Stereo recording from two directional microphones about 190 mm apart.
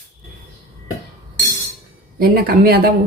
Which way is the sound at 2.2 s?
50° right (ahead or behind).